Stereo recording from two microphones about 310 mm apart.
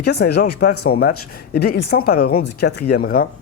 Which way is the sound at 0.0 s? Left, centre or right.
Left.